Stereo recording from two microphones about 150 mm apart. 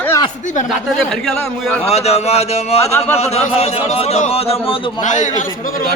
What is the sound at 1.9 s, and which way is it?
Speech, 45° left (ahead or behind).